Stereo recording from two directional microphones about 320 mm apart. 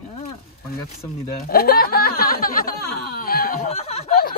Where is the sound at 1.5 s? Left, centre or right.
Left.